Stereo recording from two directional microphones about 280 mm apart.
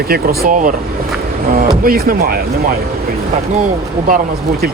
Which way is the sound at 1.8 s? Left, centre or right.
Right.